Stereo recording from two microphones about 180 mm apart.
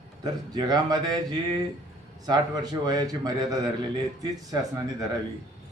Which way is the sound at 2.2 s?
20° right (ahead or behind).